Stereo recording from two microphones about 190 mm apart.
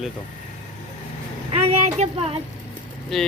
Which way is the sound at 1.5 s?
35° right (ahead or behind).